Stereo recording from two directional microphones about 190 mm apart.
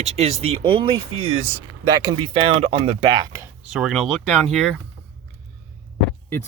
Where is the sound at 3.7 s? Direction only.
5° right (ahead or behind).